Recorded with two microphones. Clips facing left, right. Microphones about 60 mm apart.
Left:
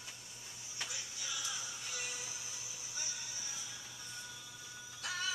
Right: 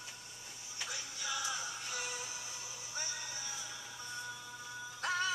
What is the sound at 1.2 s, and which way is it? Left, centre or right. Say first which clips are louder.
Music: right 6 dB; right.